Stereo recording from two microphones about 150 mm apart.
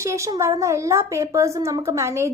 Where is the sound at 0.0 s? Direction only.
20° right (ahead or behind).